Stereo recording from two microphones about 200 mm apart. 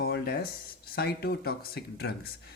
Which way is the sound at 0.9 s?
50° left (ahead or behind).